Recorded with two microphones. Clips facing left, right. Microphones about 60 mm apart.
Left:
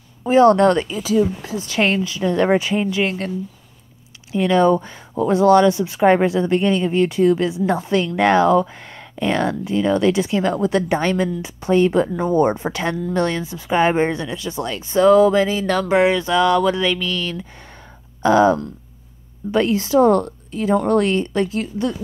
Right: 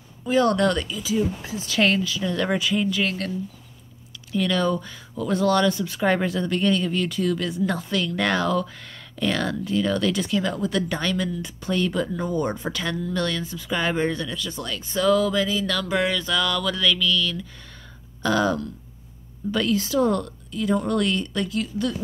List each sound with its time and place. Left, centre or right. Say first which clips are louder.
0.2 s speech: left 8 dB; left
1.1 s speech: left 6 dB; left
1.7 s speech: left 2 dB; left
4.4 s speech: left 8 dB; left
10.4 s speech: left 6 dB; left